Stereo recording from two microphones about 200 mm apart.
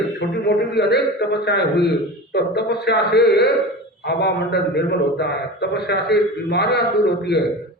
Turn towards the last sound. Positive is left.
turn(degrees=55)  # may be behind; listen again after turning